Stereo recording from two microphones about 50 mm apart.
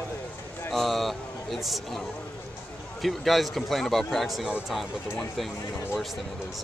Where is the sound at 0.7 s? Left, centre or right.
Centre.